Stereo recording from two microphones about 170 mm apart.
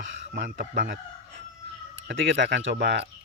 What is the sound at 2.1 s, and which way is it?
Speech, 90° right.